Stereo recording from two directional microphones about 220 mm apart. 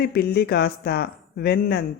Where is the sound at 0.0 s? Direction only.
45° left (ahead or behind).